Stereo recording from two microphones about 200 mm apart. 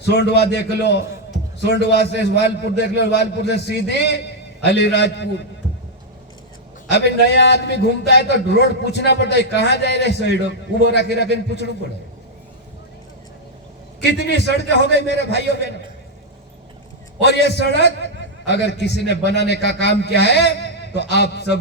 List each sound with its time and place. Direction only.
0.1 s a man's voice: 55° left (ahead or behind)
2.3 s a man's voice: 60° left (ahead or behind)
6.9 s a man's voice: 60° left (ahead or behind)
14.1 s a man's voice: 55° left (ahead or behind)
17.2 s a man's voice: 60° left (ahead or behind)